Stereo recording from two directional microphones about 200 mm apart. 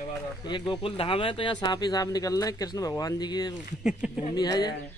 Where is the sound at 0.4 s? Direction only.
25° left (ahead or behind).